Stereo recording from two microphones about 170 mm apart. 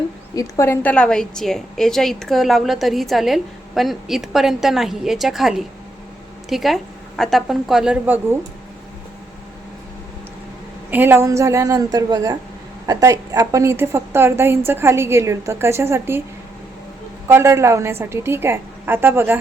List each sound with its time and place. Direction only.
0.3 s a woman's voice: 15° left (ahead or behind); by 8.4 s 10° right (ahead or behind)
10.9 s a woman's voice: 15° right (ahead or behind)
17.2 s a woman's voice: 15° right (ahead or behind)